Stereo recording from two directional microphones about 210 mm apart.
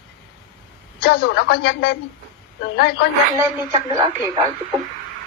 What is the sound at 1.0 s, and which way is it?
A woman's voice, 50° left (ahead or behind).